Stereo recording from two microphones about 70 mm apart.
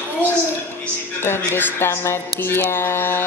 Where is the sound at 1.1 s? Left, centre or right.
Left.